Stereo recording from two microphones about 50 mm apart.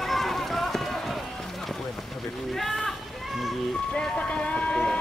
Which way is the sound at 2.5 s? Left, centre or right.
Centre.